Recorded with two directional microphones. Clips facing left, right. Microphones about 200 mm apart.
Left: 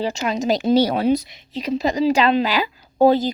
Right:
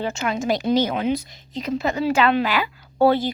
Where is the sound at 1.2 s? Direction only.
15° left (ahead or behind).